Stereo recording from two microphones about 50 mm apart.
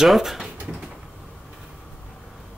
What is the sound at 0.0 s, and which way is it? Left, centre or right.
Speech, centre.